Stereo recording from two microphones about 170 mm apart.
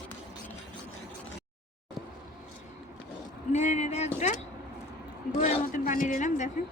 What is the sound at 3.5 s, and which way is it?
Speech, 45° left (ahead or behind).